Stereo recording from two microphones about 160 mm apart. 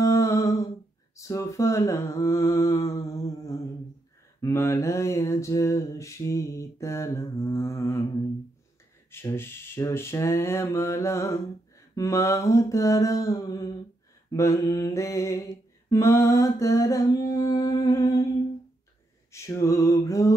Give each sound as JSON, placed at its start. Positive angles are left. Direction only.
{"t": 0.0, "sound": "a sound", "side_deg": 20}
{"t": 1.1, "sound": "mantra", "side_deg": 20}
{"t": 9.1, "sound": "mantra", "side_deg": 15}
{"t": 19.3, "sound": "mantra", "side_deg": 20}